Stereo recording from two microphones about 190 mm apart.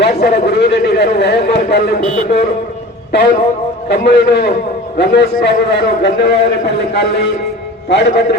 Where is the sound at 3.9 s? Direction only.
60° left (ahead or behind).